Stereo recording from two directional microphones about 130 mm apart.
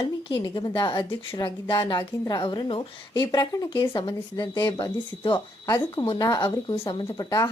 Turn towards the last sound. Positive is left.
turn(degrees=30)  # may be behind; listen again after turning